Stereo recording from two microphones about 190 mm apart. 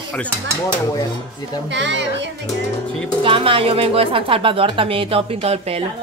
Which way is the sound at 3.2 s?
30° right (ahead or behind).